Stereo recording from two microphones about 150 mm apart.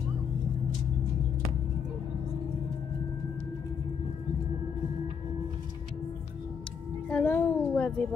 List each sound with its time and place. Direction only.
7.1 s speech: 10° left (ahead or behind)